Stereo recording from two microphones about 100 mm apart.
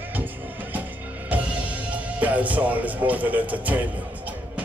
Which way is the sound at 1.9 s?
15° right (ahead or behind).